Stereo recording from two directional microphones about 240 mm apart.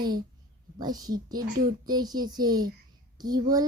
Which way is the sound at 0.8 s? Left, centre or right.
Centre.